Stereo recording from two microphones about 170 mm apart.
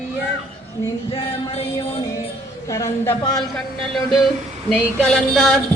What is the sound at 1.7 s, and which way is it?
Music, 20° left (ahead or behind).